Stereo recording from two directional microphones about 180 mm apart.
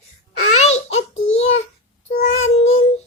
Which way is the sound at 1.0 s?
90° left.